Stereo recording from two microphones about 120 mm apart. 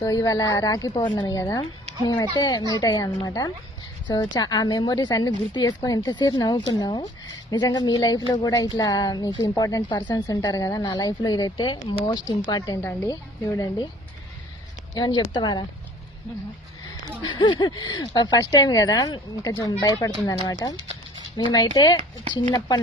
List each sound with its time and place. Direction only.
0.0 s speech: 30° left (ahead or behind)
14.9 s speech: 35° left (ahead or behind)
17.2 s speech: 40° left (ahead or behind)